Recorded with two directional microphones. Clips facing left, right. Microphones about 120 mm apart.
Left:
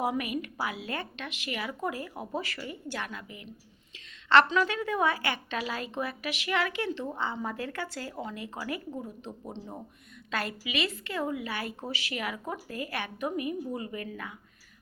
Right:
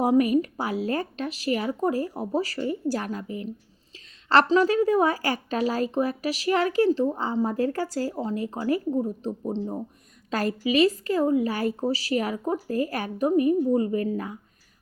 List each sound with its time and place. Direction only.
0.0 s a woman's voice: 40° right (ahead or behind)
10.3 s a woman's voice: 35° right (ahead or behind)